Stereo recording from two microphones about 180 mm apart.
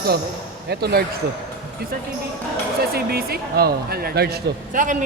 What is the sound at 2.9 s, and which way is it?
A man's voice, 60° right (ahead or behind).